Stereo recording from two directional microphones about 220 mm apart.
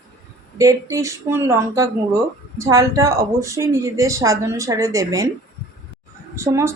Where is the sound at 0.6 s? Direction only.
15° right (ahead or behind).